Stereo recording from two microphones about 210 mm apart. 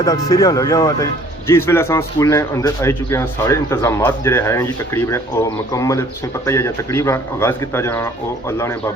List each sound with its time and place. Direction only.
0.0 s a man's voice: 15° left (ahead or behind)